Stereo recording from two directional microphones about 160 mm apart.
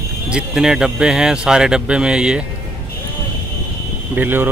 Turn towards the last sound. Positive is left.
turn(degrees=-10)  # may be behind; listen again after turning